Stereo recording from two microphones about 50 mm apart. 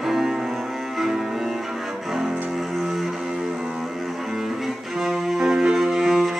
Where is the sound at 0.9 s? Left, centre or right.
Centre.